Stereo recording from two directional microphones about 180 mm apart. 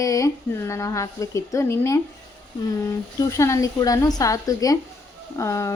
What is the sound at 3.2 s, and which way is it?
A woman's voice, 15° left (ahead or behind).